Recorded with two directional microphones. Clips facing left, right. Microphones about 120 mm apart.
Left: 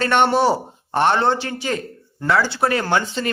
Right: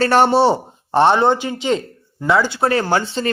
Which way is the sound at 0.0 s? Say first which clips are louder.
Right 3 dB; 35° right (ahead or behind).